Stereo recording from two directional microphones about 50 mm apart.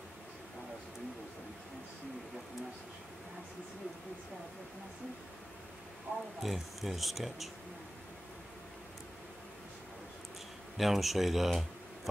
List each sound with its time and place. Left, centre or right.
6.1 s a sound: right
6.4 s speech: centre
10.8 s speech: centre